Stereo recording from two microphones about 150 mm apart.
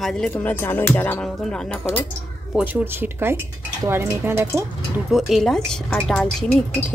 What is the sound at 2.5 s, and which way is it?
Speech, 10° right (ahead or behind).